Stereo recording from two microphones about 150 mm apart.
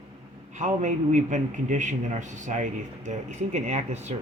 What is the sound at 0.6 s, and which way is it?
A man's voice, 50° right (ahead or behind).